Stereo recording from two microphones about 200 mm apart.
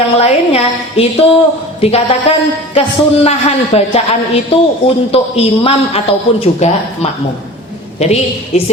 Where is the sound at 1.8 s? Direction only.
30° left (ahead or behind).